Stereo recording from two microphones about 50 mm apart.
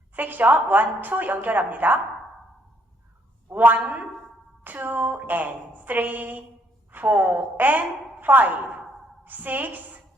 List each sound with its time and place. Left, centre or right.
0.2 s a woman's voice: right
3.5 s a woman's voice: right